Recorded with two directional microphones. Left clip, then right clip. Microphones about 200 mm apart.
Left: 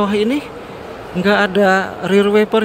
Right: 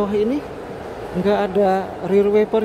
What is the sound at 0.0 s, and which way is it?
Speech, centre (ahead or behind).